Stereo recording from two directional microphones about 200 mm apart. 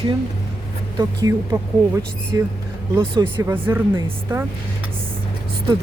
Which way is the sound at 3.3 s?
10° right (ahead or behind).